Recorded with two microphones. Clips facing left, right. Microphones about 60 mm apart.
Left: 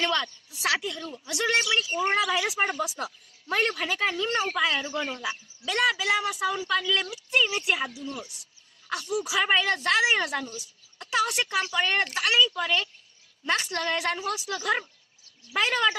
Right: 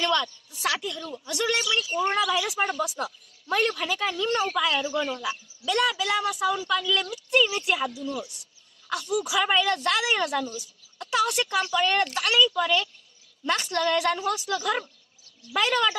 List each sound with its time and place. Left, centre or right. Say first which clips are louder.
0.0 s a woman's voice: right 2 dB; centre
1.4 s speech: left 1 dB; left